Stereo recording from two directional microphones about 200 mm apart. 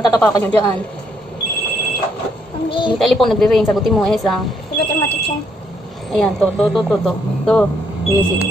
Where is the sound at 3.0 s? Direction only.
Centre (ahead or behind).